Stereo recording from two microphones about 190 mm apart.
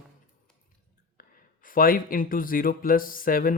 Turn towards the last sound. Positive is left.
turn(degrees=50)  # may be behind; listen again after turning